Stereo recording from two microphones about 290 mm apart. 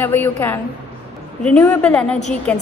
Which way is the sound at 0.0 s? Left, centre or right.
Centre.